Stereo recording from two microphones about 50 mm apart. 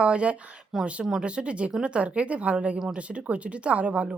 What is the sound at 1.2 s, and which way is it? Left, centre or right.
Speech, right.